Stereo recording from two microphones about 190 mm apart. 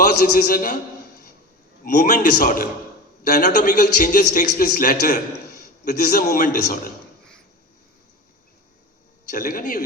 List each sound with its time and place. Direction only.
0.0 s a man's voice: 45° left (ahead or behind)
1.8 s a man's voice: 45° left (ahead or behind)
9.3 s a man's voice: 45° left (ahead or behind)